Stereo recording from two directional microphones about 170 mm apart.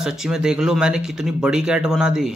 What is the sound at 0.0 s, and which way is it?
Speech, 5° right (ahead or behind).